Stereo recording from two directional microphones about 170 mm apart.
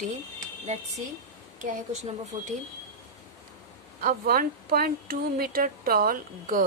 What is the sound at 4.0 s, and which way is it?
Speech, 60° right (ahead or behind).